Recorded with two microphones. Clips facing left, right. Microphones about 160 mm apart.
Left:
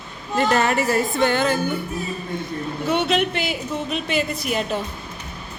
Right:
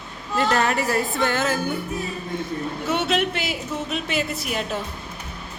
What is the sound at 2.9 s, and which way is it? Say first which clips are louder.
A woman's voice: left 2 dB; 5° right (ahead or behind).